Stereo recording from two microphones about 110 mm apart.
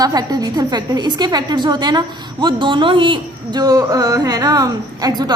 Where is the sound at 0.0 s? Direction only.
35° right (ahead or behind).